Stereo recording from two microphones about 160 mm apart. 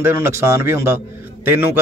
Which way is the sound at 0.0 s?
15° right (ahead or behind).